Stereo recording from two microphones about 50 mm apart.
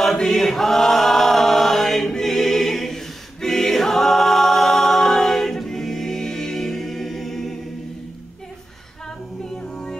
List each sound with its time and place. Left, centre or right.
0.0 s chant: centre
9.6 s music: centre